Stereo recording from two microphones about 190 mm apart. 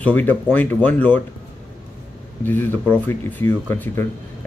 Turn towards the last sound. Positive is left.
turn(degrees=10)  # may be behind; listen again after turning